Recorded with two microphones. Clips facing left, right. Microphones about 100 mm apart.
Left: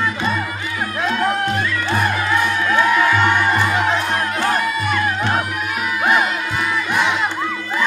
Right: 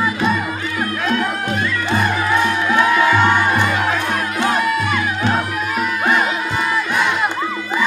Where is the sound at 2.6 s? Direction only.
5° right (ahead or behind).